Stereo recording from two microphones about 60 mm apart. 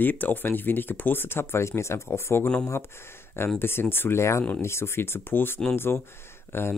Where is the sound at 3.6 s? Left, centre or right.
Left.